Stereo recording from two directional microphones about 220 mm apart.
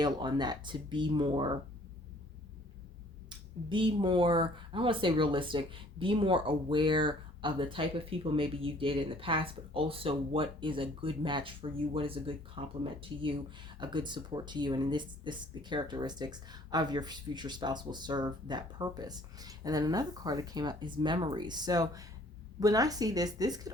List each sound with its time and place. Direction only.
0.0 s speech: 20° right (ahead or behind)
3.2 s speech: 20° right (ahead or behind)